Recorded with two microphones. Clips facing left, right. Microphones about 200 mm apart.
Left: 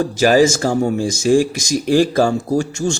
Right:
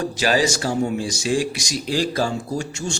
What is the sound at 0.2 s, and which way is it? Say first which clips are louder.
Speech: left 8 dB; 45° left (ahead or behind).